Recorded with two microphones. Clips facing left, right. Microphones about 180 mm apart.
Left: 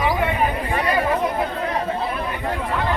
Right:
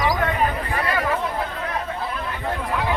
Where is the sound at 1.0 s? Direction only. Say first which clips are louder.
Left 3 dB; 25° left (ahead or behind).